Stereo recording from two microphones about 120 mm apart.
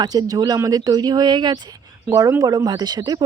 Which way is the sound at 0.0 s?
30° right (ahead or behind).